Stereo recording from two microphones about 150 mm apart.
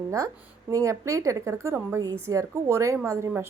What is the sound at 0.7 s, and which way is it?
A woman's voice, 20° right (ahead or behind).